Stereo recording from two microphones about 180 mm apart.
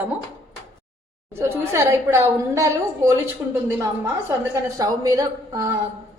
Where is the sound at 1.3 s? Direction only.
15° right (ahead or behind).